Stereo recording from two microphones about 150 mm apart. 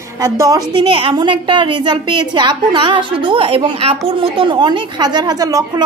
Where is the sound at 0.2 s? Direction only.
20° right (ahead or behind).